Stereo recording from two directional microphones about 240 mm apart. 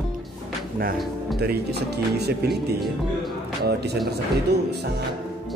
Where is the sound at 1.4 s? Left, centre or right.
Right.